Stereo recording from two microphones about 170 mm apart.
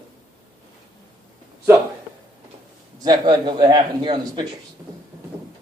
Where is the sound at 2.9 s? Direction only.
25° right (ahead or behind).